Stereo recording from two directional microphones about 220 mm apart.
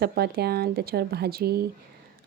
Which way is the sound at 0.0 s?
45° right (ahead or behind).